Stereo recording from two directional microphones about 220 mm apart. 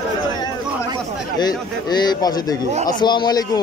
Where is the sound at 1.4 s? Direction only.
20° left (ahead or behind).